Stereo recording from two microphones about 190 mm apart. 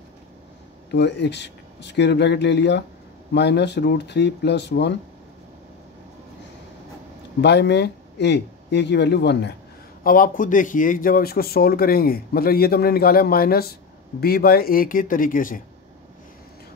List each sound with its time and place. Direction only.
0.9 s speech: 65° left (ahead or behind)
7.4 s speech: 60° left (ahead or behind)
10.0 s speech: 45° left (ahead or behind)